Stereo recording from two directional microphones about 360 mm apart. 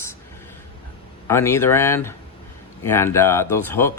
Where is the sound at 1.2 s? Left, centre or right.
Centre.